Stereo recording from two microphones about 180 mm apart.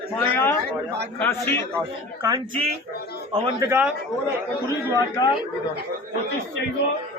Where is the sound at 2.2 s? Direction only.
25° right (ahead or behind).